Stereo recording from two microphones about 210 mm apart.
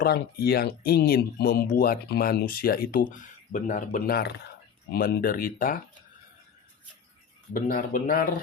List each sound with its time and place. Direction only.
0.0 s speech: 45° left (ahead or behind)
7.5 s speech: 40° left (ahead or behind)